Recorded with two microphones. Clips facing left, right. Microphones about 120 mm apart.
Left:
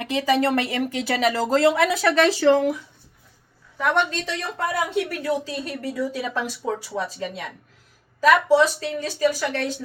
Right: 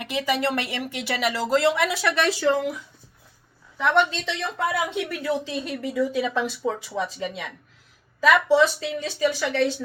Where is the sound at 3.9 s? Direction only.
45° left (ahead or behind).